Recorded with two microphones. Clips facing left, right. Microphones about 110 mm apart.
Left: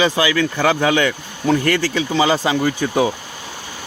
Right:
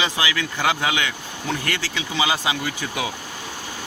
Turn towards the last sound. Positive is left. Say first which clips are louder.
# left 10 dB
turn(degrees=40)  # may be behind; listen again after turning